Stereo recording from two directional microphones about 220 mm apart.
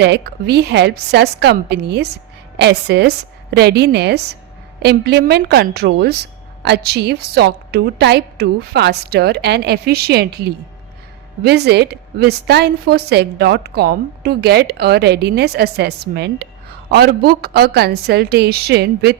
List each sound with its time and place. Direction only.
0.0 s a woman's voice: 50° right (ahead or behind)